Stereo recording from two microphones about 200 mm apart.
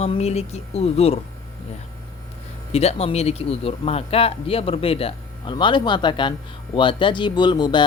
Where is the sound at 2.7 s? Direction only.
30° left (ahead or behind).